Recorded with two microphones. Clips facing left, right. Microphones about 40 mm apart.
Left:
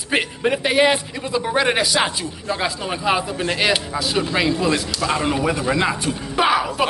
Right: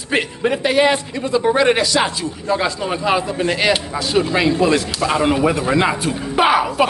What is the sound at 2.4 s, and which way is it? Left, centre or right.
Speech, centre.